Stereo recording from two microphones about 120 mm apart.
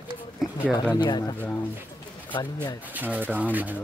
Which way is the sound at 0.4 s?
5° right (ahead or behind).